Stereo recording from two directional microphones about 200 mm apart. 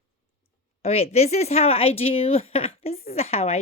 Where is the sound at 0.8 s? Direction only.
30° left (ahead or behind).